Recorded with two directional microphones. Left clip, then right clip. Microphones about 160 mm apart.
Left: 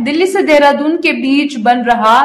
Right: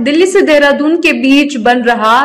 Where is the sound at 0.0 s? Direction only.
20° right (ahead or behind).